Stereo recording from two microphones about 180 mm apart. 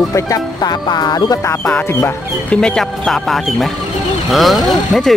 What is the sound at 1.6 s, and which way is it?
Speech, 5° left (ahead or behind).